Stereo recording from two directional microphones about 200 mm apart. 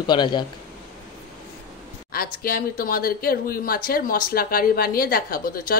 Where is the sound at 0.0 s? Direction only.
20° left (ahead or behind).